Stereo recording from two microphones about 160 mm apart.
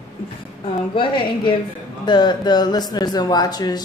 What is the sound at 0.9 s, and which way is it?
A woman's voice, 30° left (ahead or behind).